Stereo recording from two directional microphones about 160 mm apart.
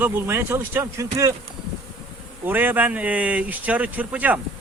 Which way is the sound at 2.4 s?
10° right (ahead or behind).